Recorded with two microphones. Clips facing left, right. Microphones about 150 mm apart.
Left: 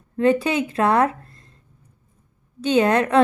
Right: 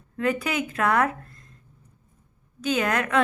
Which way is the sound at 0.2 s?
30° left (ahead or behind).